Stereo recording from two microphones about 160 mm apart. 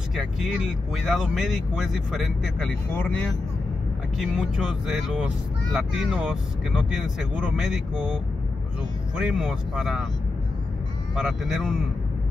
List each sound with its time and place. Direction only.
0.1 s speech: centre (ahead or behind)
4.2 s speech: 5° right (ahead or behind)
11.1 s speech: centre (ahead or behind)